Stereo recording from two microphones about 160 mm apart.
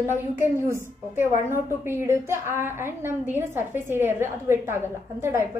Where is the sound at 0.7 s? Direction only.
15° right (ahead or behind).